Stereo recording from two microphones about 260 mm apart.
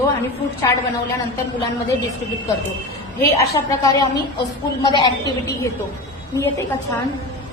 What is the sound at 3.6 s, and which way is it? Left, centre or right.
Speech, centre.